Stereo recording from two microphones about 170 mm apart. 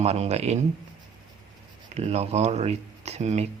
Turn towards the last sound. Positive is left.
turn(degrees=-40)  # may be behind; listen again after turning